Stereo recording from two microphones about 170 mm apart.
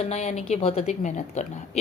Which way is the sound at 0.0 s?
40° left (ahead or behind).